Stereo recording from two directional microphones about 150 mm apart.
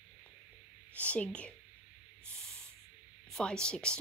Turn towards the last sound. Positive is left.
turn(degrees=5)  # may be behind; listen again after turning